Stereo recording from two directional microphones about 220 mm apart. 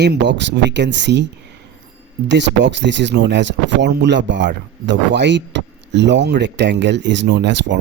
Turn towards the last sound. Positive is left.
turn(degrees=-55)  # may be behind; listen again after turning